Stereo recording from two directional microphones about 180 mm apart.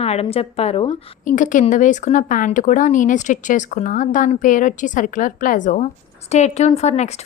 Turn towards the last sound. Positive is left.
turn(degrees=40)  # may be behind; listen again after turning